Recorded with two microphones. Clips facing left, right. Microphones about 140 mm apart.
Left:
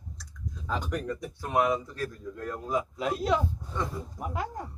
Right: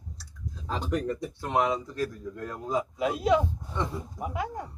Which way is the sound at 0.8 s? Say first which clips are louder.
Right 3 dB; 25° right (ahead or behind).